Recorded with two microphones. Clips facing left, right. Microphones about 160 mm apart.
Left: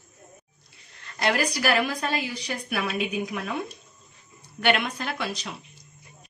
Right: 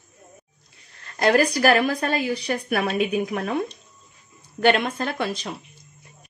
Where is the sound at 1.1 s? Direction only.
40° right (ahead or behind).